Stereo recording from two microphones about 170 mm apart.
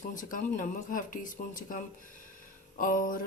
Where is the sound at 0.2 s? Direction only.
50° left (ahead or behind).